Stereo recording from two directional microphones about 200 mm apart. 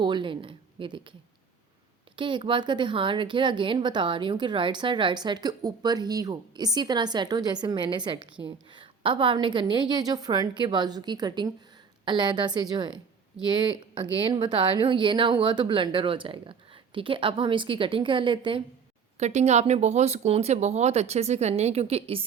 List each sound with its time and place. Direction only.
0.0 s speech: 25° right (ahead or behind)
2.1 s speech: 25° right (ahead or behind)